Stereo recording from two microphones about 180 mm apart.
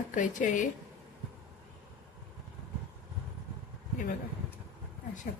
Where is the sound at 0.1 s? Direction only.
45° left (ahead or behind).